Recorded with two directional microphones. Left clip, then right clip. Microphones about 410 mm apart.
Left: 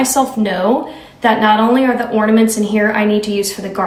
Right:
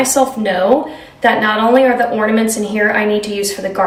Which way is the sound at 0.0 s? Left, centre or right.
Centre.